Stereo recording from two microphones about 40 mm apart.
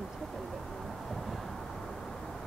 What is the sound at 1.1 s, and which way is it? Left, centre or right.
Vehicle, centre.